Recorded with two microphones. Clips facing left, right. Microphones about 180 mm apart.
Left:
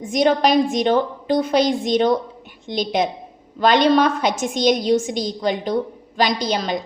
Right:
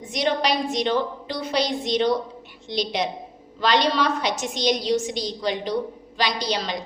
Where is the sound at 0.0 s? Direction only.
45° left (ahead or behind).